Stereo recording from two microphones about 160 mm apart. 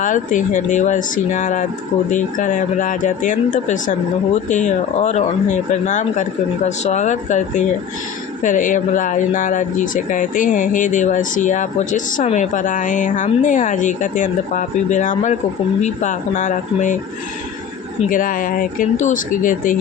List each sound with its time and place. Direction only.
0.0 s speech: 55° left (ahead or behind)
18.1 s speech: 55° left (ahead or behind)